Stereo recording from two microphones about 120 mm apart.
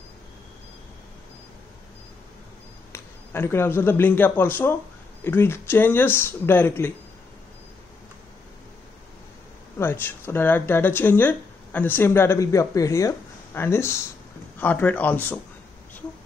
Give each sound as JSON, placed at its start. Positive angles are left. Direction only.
{"t": 2.9, "sound": "a man's voice", "side_deg": 20}
{"t": 9.8, "sound": "speech", "side_deg": 20}